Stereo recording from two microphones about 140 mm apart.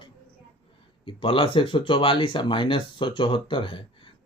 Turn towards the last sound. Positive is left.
turn(degrees=40)  # may be behind; listen again after turning